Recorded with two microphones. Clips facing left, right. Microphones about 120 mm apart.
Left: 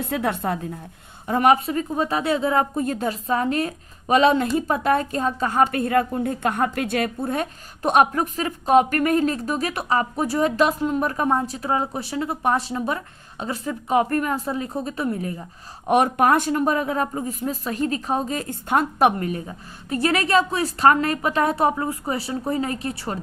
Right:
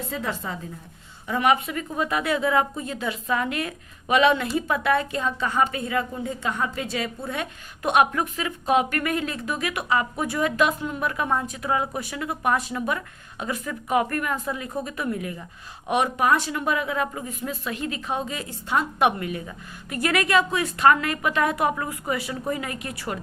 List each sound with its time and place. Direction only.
0.0 s a woman's voice: 60° left (ahead or behind)
1.3 s a woman's voice: 40° left (ahead or behind); by 7.1 s 55° left (ahead or behind)
7.3 s a woman's voice: 40° left (ahead or behind)
15.9 s a woman's voice: 45° left (ahead or behind); by 23.2 s 30° left (ahead or behind)